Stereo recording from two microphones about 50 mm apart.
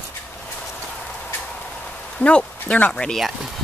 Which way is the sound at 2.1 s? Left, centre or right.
Left.